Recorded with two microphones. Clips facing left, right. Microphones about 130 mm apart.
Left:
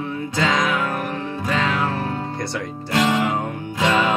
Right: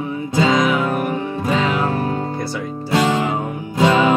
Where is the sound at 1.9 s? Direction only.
45° right (ahead or behind).